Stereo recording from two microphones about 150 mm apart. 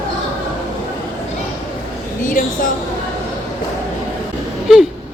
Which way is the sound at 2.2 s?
65° left (ahead or behind).